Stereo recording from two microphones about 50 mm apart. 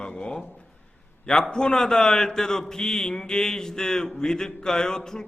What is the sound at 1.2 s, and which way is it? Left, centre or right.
A man's voice, centre.